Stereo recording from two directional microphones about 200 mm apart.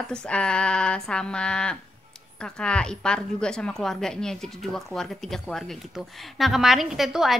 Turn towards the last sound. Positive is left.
turn(degrees=0)  # may be behind; listen again after turning